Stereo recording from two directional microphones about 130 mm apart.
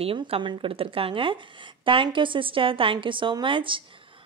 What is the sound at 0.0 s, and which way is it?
A woman's voice, 45° right (ahead or behind).